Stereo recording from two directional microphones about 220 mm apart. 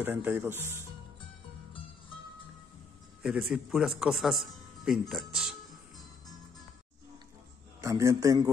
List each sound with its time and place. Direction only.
0.0 s speech: 10° right (ahead or behind)
3.2 s a man's voice: 5° right (ahead or behind)
7.8 s speech: 15° right (ahead or behind)